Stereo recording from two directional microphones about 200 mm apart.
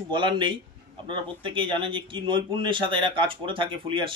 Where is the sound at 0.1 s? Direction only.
25° right (ahead or behind).